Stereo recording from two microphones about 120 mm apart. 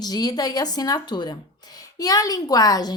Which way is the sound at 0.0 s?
35° left (ahead or behind).